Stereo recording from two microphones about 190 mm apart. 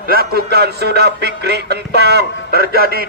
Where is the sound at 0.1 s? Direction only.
55° right (ahead or behind).